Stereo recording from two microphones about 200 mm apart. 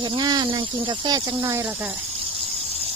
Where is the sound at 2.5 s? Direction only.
30° right (ahead or behind).